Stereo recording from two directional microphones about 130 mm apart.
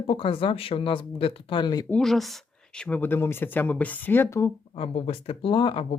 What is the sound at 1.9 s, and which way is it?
Speech, centre (ahead or behind).